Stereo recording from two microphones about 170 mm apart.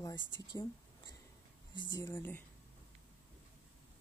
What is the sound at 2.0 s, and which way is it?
Speech, 15° left (ahead or behind).